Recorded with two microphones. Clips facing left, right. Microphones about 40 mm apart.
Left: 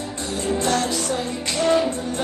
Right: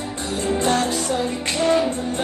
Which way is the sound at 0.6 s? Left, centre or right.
Right.